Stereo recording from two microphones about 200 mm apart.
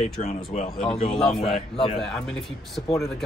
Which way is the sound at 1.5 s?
30° left (ahead or behind).